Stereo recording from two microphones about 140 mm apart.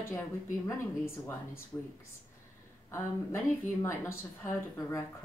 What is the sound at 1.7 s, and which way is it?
Speech, 20° left (ahead or behind).